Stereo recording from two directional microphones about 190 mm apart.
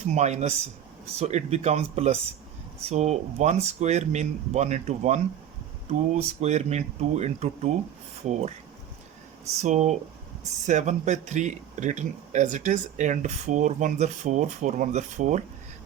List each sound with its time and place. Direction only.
0.0 s speech: 35° right (ahead or behind)